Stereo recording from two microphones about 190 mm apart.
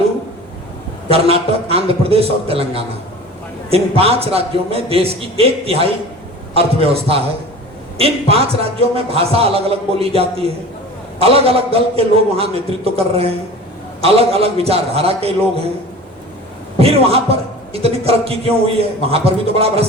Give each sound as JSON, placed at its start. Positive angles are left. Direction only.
{"t": 1.1, "sound": "a man's voice", "side_deg": -30}
{"t": 16.7, "sound": "a man's voice", "side_deg": -30}